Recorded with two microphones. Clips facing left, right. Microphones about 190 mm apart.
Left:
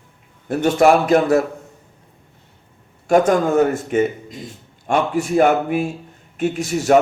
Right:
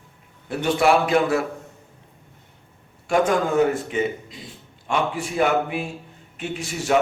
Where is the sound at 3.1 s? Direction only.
45° left (ahead or behind).